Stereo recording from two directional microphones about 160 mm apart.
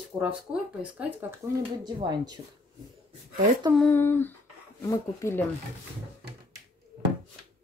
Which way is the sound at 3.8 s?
15° left (ahead or behind).